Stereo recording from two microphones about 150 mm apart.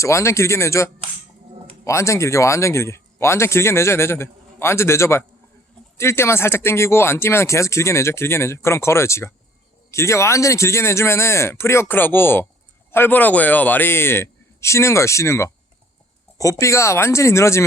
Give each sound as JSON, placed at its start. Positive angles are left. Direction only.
{"t": 0.0, "sound": "speech", "side_deg": 20}